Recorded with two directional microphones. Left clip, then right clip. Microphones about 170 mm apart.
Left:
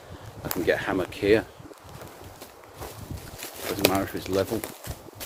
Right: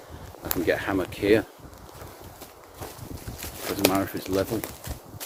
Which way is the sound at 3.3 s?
15° right (ahead or behind).